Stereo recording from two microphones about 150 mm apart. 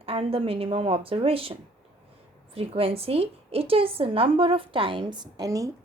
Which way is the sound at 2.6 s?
40° right (ahead or behind).